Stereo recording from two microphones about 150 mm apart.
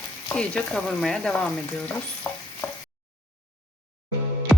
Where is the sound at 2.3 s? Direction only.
15° left (ahead or behind).